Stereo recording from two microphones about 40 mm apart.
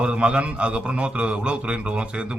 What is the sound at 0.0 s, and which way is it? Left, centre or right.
A man's voice, right.